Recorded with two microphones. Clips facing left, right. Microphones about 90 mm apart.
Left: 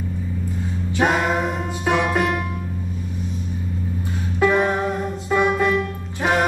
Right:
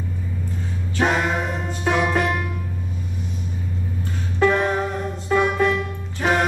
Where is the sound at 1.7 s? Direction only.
15° left (ahead or behind).